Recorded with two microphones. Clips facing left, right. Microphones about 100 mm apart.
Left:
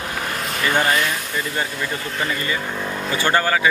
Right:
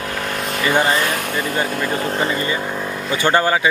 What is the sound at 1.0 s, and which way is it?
Speech, 55° right (ahead or behind).